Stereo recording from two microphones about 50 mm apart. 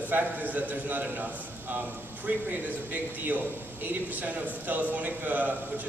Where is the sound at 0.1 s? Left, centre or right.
Right.